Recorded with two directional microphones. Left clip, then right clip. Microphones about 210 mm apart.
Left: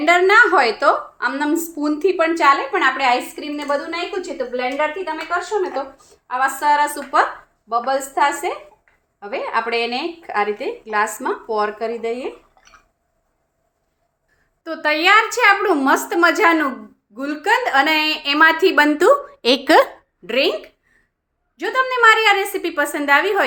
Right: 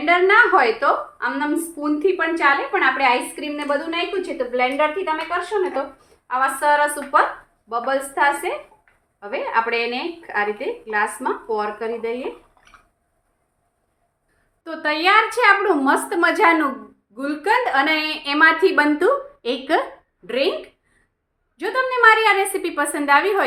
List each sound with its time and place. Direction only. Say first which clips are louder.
0.0 s a woman's voice: left 2 dB; 45° left (ahead or behind); by 5.8 s 20° left (ahead or behind)
6.2 s a woman's voice: left 1 dB; 35° left (ahead or behind)
14.6 s a woman's voice: left 3 dB; 25° left (ahead or behind)
19.4 s a woman's voice: left 7 dB; 55° left (ahead or behind)
20.2 s a woman's voice: left 3 dB; 30° left (ahead or behind)
21.5 s a woman's voice: left 2 dB; 20° left (ahead or behind)